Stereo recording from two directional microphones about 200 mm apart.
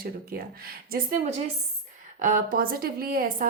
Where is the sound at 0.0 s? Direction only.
45° right (ahead or behind).